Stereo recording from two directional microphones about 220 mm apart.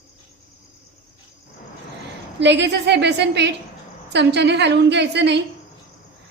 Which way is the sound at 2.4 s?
50° right (ahead or behind).